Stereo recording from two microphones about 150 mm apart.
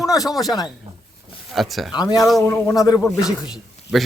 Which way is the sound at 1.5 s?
Centre (ahead or behind).